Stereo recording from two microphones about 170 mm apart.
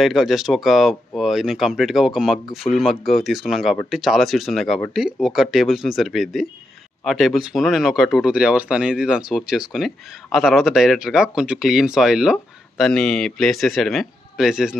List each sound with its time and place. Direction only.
0.0 s speech: centre (ahead or behind)